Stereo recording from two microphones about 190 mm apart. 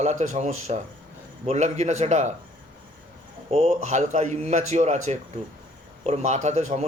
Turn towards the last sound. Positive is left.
turn(degrees=-40)  # may be behind; listen again after turning